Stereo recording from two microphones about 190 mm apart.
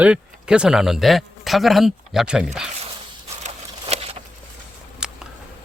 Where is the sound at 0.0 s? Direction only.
5° right (ahead or behind).